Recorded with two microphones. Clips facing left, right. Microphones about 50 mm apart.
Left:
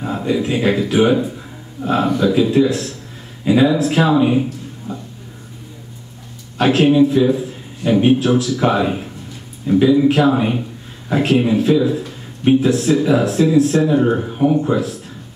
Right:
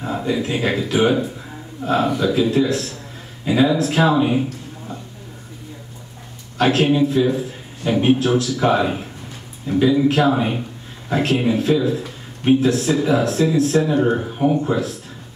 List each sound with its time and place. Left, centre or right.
0.0 s a man's voice: centre
6.6 s a man's voice: centre
10.3 s a man's voice: centre